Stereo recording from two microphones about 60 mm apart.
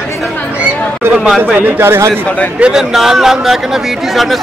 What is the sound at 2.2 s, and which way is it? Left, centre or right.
Speech, left.